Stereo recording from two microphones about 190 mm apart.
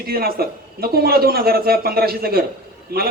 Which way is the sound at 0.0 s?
55° right (ahead or behind).